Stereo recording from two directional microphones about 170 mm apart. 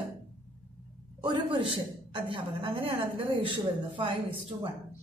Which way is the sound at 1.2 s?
30° right (ahead or behind).